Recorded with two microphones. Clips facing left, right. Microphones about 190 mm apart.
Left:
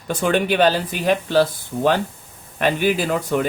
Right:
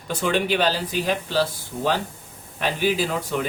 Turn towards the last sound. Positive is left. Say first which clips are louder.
# left 4 dB
turn(degrees=55)  # may be behind; listen again after turning